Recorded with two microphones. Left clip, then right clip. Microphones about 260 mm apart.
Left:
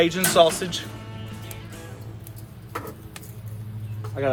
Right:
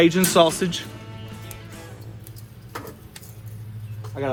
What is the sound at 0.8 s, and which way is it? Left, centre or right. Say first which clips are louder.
Music: even; centre.